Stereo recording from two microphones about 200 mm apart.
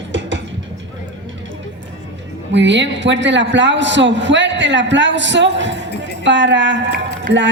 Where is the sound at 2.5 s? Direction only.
65° right (ahead or behind).